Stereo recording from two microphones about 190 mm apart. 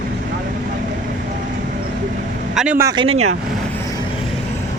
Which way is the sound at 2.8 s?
20° right (ahead or behind).